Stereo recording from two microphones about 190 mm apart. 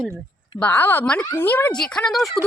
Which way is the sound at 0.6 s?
10° left (ahead or behind).